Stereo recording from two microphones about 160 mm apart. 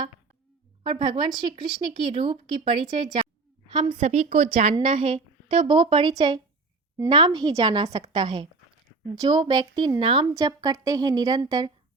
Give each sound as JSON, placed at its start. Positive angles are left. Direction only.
{"t": 0.9, "sound": "a woman's voice", "side_deg": -30}
{"t": 4.0, "sound": "a woman's voice", "side_deg": -45}
{"t": 10.3, "sound": "a woman's voice", "side_deg": -20}